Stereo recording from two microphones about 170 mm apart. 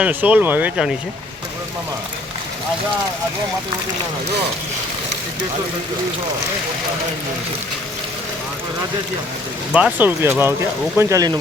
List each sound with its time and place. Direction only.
0.0 s speech: 10° right (ahead or behind)
9.7 s speech: 10° right (ahead or behind)